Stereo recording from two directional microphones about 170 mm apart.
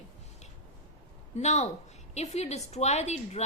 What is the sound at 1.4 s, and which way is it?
A woman's voice, 40° left (ahead or behind).